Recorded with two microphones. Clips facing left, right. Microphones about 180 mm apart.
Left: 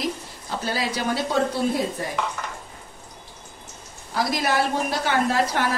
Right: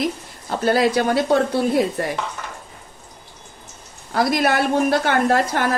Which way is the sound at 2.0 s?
70° right (ahead or behind).